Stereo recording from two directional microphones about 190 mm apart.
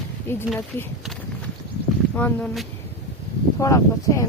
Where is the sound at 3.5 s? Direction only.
15° left (ahead or behind).